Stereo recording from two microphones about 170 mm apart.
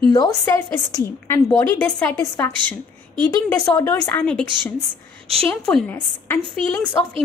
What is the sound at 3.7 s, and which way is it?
Speech, 15° left (ahead or behind).